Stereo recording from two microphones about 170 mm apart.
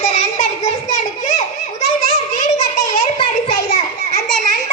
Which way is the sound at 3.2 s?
35° left (ahead or behind).